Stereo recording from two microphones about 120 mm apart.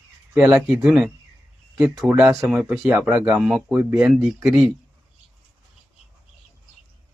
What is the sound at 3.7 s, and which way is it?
Speech, 15° right (ahead or behind).